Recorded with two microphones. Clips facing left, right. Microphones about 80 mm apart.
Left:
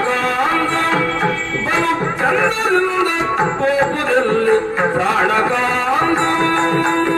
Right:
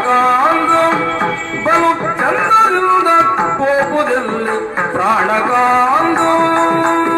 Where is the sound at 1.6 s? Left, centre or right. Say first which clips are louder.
Right 6 dB; right.